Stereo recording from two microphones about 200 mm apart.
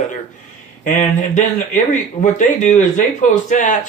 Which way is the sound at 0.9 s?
40° left (ahead or behind).